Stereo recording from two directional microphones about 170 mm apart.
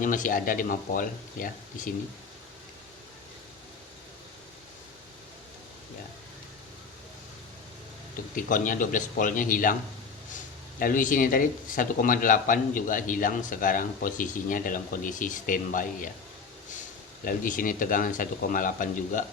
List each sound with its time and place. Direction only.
0.0 s speech: 50° left (ahead or behind)
8.1 s speech: 55° left (ahead or behind)
17.2 s speech: 55° left (ahead or behind)